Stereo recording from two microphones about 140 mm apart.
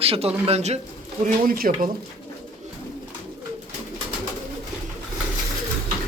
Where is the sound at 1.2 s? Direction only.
90° right.